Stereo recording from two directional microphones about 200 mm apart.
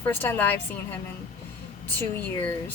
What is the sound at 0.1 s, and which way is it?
Speech, 10° left (ahead or behind).